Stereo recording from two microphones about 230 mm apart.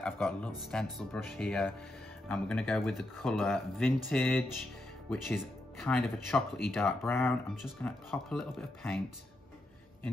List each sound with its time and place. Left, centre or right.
0.0 s music: centre
0.6 s speech: centre